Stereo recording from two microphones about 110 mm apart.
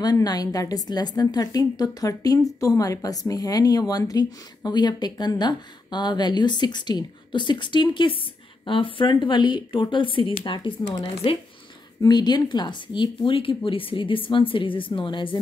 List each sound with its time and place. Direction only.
0.0 s a woman's voice: 40° left (ahead or behind)
12.0 s speech: 40° left (ahead or behind)